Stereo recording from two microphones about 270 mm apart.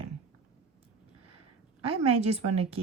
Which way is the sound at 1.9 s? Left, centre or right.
Right.